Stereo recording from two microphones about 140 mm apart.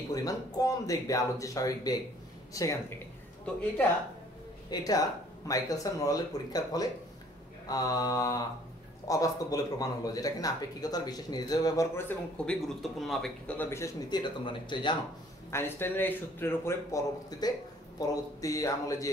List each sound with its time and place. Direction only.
0.1 s speech: 25° left (ahead or behind)
4.6 s speech: 25° left (ahead or behind)
12.4 s speech: centre (ahead or behind)
13.6 s speech: 20° left (ahead or behind); by 15.0 s 35° left (ahead or behind)
15.5 s a man's voice: 15° left (ahead or behind)